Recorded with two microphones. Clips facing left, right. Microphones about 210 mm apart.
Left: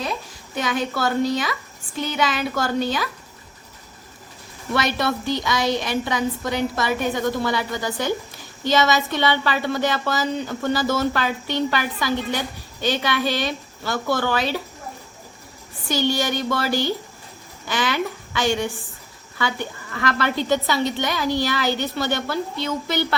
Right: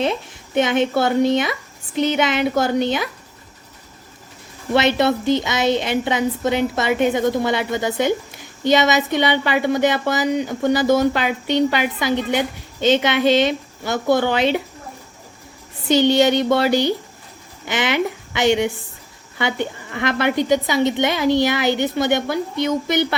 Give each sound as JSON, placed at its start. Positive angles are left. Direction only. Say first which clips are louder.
{"t": 0.0, "sound": "speech", "louder": "right 7 dB", "side_deg": -25}
{"t": 4.7, "sound": "speech", "louder": "right 6 dB", "side_deg": -25}
{"t": 15.9, "sound": "a woman's voice", "louder": "right 8 dB", "side_deg": -20}